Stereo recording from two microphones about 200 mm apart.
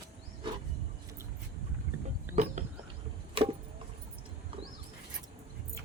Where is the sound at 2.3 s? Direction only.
35° right (ahead or behind).